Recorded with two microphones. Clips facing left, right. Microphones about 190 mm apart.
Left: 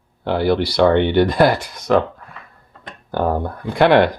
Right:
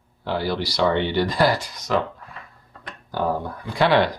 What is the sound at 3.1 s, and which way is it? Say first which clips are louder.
Speech: left 4 dB; 55° left (ahead or behind).